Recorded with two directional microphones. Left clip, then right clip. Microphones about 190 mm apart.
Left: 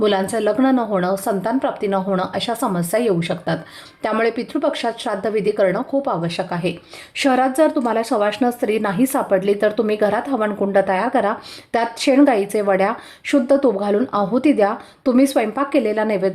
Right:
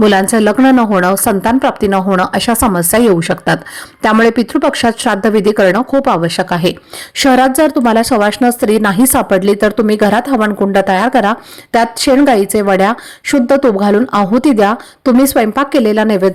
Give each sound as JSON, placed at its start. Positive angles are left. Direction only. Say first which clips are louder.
{"t": 0.0, "sound": "a woman's voice", "louder": "right 8 dB", "side_deg": -35}